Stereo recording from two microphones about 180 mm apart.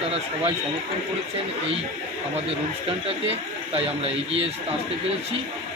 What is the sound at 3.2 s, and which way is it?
Speech, 30° right (ahead or behind).